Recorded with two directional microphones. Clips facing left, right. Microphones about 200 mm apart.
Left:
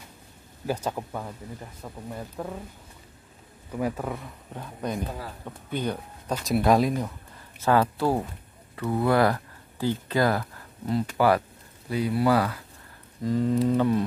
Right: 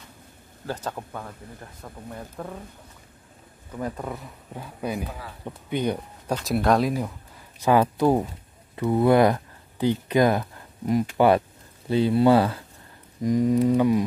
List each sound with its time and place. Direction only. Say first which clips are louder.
0.7 s speech: left 3 dB; 10° left (ahead or behind)
3.8 s speech: left 2 dB; 5° left (ahead or behind); by 6.3 s 15° right (ahead or behind)
6.3 s speech: even; centre (ahead or behind)
7.6 s speech: right 3 dB; 15° right (ahead or behind)
13.2 s speech: right 3 dB; 15° right (ahead or behind)